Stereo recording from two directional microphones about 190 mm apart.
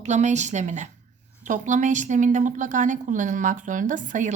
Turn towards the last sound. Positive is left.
turn(degrees=-40)  # may be behind; listen again after turning